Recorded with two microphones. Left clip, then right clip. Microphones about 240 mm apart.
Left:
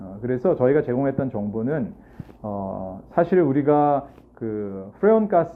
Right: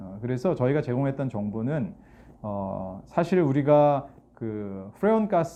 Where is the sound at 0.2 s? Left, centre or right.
Right.